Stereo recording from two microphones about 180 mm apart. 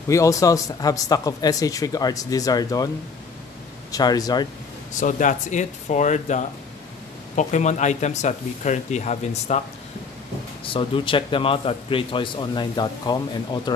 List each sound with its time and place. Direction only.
0.1 s speech: 15° left (ahead or behind)
3.9 s speech: 20° left (ahead or behind)
5.0 s speech: 45° left (ahead or behind)
10.6 s speech: 30° left (ahead or behind)